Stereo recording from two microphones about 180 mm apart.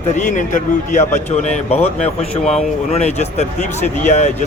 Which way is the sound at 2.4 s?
5° left (ahead or behind).